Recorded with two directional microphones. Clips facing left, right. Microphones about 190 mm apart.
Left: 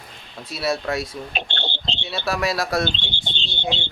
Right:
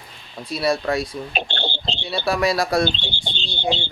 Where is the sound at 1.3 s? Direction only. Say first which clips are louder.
Right 5 dB; 40° right (ahead or behind).